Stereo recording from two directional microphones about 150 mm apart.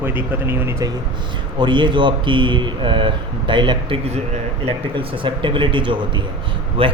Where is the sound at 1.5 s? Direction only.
30° right (ahead or behind).